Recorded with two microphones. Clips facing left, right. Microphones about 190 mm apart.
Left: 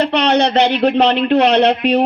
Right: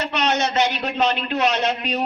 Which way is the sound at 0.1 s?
60° left (ahead or behind).